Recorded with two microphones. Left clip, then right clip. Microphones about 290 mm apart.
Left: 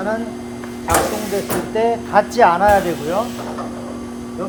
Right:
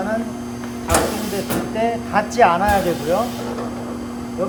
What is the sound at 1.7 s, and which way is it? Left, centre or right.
Speech, left.